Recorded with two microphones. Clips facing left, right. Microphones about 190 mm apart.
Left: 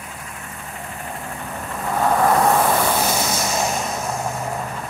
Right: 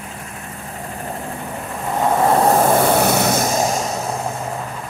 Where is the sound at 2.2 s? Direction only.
30° right (ahead or behind).